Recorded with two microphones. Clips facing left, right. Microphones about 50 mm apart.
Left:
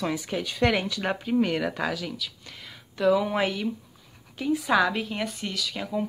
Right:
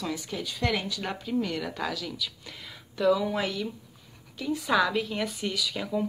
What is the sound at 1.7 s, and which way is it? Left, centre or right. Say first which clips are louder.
Speech: left 3 dB; left.